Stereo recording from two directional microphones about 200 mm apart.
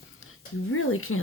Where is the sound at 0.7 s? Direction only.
90° left.